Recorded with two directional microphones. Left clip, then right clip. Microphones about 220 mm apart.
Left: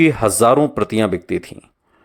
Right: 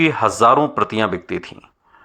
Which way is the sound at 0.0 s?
50° left (ahead or behind).